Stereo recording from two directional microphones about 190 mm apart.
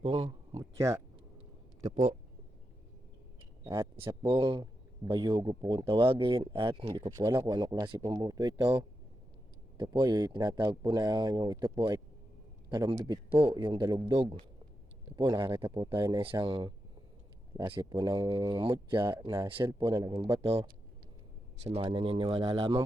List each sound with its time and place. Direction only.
0.0 s speech: 30° right (ahead or behind)
0.6 s speech: 15° right (ahead or behind)
3.6 s a man's voice: 15° right (ahead or behind)